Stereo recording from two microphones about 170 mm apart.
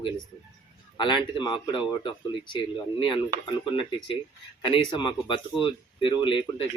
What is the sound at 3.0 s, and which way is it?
Speech, 30° left (ahead or behind).